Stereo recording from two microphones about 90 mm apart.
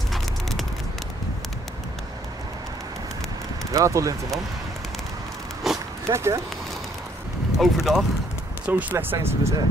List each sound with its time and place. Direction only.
0.1 s a sound: centre (ahead or behind)
3.7 s speech: 35° right (ahead or behind)
5.7 s dog: 5° right (ahead or behind)
6.0 s speech: 35° right (ahead or behind)
7.5 s speech: 5° right (ahead or behind)
8.6 s speech: 15° right (ahead or behind)
8.9 s speech: 30° right (ahead or behind)